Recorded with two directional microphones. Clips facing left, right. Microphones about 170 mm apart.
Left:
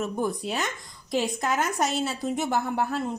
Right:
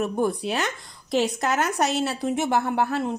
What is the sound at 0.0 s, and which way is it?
Speech, 65° right (ahead or behind).